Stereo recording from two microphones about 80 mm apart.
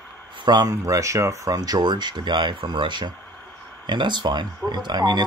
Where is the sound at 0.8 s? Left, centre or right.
Right.